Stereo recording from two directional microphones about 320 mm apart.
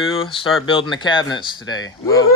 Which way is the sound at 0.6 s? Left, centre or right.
Centre.